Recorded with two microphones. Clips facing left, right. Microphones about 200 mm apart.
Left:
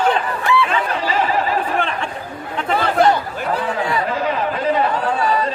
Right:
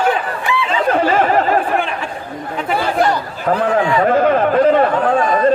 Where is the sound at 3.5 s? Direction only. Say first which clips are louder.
Right 6 dB; 60° right (ahead or behind).